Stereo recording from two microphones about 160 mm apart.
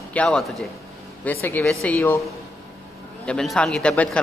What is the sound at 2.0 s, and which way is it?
Speech, 15° left (ahead or behind).